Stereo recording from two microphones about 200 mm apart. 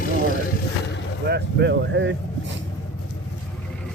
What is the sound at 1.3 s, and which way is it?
Speech, 60° right (ahead or behind).